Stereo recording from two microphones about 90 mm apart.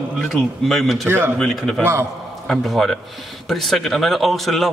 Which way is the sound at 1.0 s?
25° right (ahead or behind).